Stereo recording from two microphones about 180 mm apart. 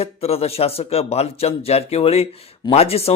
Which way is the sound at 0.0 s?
35° left (ahead or behind).